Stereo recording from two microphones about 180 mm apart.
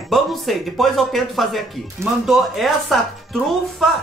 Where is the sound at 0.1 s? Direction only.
Centre (ahead or behind).